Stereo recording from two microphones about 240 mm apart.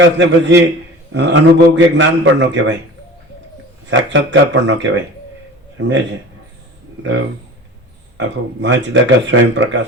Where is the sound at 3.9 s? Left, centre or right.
Right.